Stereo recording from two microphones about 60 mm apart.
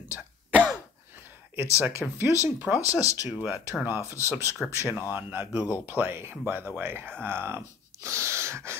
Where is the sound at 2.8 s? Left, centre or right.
Left.